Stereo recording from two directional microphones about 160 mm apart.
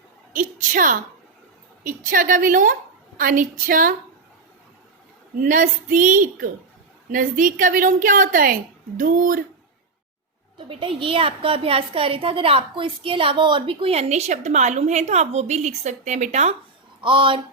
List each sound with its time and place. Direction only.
0.3 s a woman's voice: 60° right (ahead or behind)
5.4 s a woman's voice: 55° right (ahead or behind)
10.6 s a woman's voice: 35° right (ahead or behind)
17.0 s a woman's voice: 30° right (ahead or behind)